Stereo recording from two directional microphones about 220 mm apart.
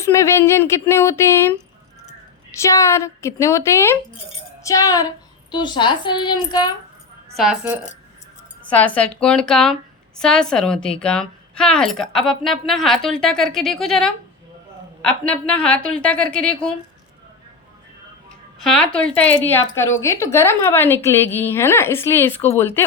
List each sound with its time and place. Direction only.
0.0 s a woman's voice: 10° left (ahead or behind)
2.6 s a woman's voice: 15° left (ahead or behind)
7.3 s speech: centre (ahead or behind)
8.6 s speech: 5° left (ahead or behind)
15.3 s speech: 5° left (ahead or behind)
18.6 s a woman's voice: 5° left (ahead or behind)